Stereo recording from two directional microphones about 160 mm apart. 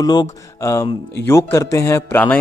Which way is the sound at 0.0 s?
25° left (ahead or behind).